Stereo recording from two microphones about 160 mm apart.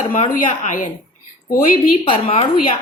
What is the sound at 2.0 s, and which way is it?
Speech, 35° left (ahead or behind).